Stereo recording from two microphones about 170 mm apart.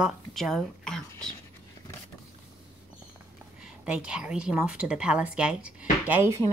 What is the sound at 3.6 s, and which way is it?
A woman's voice, 5° right (ahead or behind).